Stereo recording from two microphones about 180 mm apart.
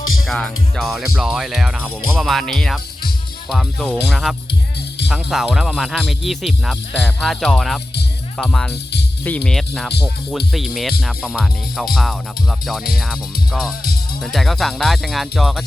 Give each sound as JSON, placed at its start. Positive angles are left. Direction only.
{"t": 0.3, "sound": "speech", "side_deg": 0}